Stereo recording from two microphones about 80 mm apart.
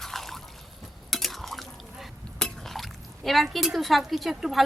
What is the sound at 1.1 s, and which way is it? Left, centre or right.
Speech, centre.